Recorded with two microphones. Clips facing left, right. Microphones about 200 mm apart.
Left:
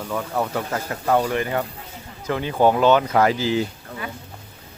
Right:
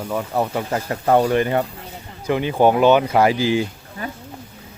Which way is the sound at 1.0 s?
30° right (ahead or behind).